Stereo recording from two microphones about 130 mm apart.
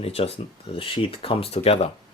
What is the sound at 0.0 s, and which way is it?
Speech, 50° left (ahead or behind).